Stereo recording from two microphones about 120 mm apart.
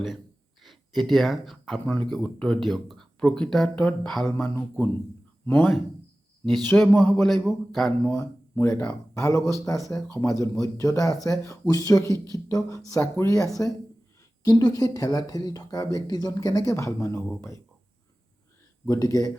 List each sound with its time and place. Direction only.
0.6 s speech: centre (ahead or behind)
4.4 s a man's voice: 15° left (ahead or behind)
6.7 s a man's voice: 15° left (ahead or behind)
6.9 s speech: 5° left (ahead or behind)
8.0 s speech: 25° left (ahead or behind)
8.8 s a man's voice: 10° left (ahead or behind)
9.5 s speech: 25° left (ahead or behind)
18.9 s speech: 30° left (ahead or behind)